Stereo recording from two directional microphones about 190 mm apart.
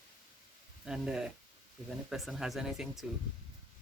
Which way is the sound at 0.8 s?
5° right (ahead or behind).